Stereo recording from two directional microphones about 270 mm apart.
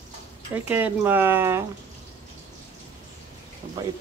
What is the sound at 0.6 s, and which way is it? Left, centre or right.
Speech, centre.